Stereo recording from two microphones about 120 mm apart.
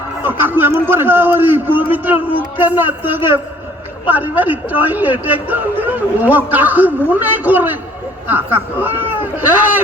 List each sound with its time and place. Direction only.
0.2 s speech: 15° right (ahead or behind)